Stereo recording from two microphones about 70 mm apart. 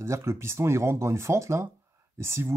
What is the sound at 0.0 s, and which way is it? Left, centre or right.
Speech, right.